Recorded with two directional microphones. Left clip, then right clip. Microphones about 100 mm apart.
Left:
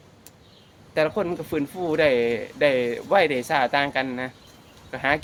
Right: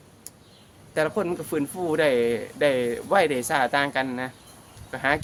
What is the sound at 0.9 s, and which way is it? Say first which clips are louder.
Speech: left 2 dB; 15° right (ahead or behind).